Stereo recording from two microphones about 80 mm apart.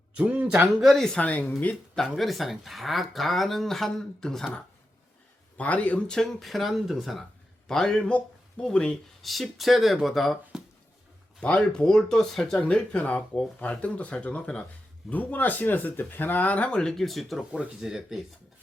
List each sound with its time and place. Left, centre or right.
0.2 s speech: centre
0.9 s speech: centre
1.2 s speech: centre
2.0 s speech: centre
5.5 s speech: centre
6.1 s speech: centre
11.3 s speech: centre